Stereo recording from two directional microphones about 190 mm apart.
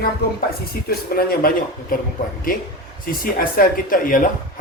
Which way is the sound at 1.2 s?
50° left (ahead or behind).